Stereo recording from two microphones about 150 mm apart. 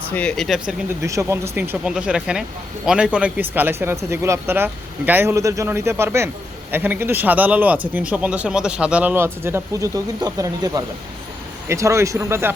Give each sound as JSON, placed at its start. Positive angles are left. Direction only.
{"t": 0.1, "sound": "speech", "side_deg": 10}
{"t": 1.0, "sound": "a man's voice", "side_deg": -20}